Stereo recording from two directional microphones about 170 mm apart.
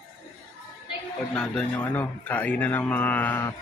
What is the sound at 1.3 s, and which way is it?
Speech, 5° left (ahead or behind).